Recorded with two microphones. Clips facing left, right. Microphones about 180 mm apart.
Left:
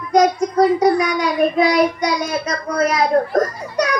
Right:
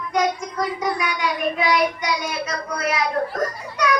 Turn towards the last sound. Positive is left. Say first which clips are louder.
# left 6 dB
turn(degrees=40)  # may be behind; listen again after turning